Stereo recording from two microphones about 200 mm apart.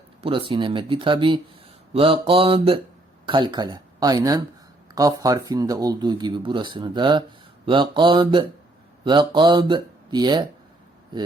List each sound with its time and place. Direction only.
0.2 s speech: 25° right (ahead or behind)